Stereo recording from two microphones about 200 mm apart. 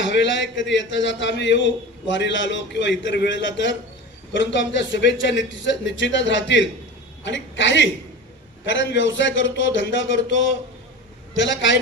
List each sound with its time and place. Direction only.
0.0 s a man's voice: 65° left (ahead or behind)